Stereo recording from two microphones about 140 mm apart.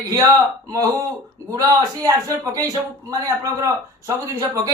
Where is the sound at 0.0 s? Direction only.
25° right (ahead or behind).